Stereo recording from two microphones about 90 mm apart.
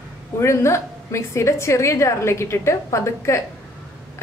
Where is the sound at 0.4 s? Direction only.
30° left (ahead or behind).